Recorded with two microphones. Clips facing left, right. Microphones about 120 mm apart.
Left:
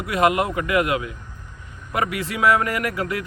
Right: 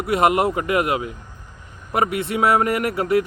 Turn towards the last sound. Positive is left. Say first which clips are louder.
# right 6 dB
turn(degrees=-30)  # may be behind; listen again after turning